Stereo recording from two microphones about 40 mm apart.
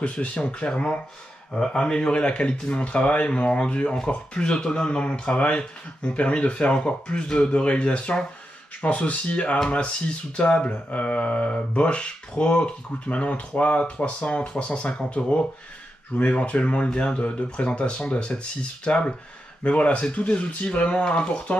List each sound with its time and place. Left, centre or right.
0.0 s speech: left